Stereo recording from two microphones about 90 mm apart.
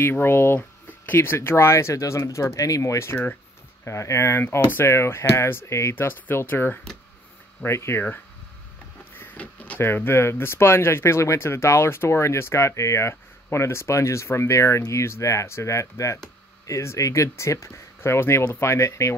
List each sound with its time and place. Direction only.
0.0 s speech: 25° left (ahead or behind)
9.1 s a sound: 20° left (ahead or behind)
9.8 s speech: 25° left (ahead or behind)